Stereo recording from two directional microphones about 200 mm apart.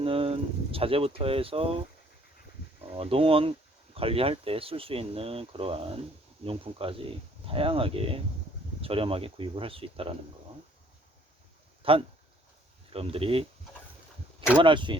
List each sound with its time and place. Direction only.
0.0 s speech: 30° right (ahead or behind)
2.9 s speech: 30° right (ahead or behind)
11.8 s speech: 25° right (ahead or behind)
14.6 s speech: 25° right (ahead or behind)